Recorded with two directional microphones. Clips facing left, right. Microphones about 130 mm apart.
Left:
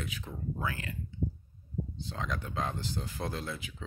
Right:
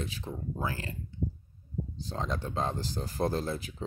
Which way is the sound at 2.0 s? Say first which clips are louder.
Right 5 dB; 35° right (ahead or behind).